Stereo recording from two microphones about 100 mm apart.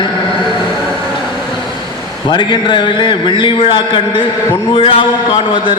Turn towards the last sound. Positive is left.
turn(degrees=60)  # may be behind; listen again after turning